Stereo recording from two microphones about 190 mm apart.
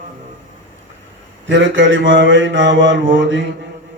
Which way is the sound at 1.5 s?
80° right.